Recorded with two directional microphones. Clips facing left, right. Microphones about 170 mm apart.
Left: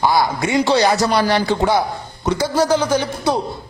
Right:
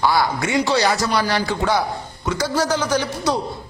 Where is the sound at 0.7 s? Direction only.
30° left (ahead or behind).